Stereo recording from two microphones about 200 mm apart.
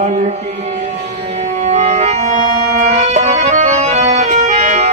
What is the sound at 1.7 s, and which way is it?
Music, 35° right (ahead or behind).